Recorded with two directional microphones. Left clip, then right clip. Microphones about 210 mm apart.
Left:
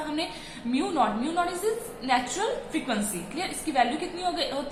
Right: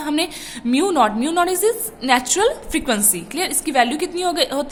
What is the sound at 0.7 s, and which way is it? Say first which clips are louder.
A woman's voice: right 9 dB; 50° right (ahead or behind).